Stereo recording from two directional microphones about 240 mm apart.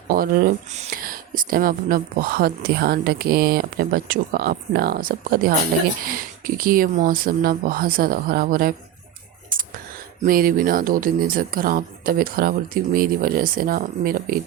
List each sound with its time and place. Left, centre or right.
0.1 s speech: right
10.2 s speech: right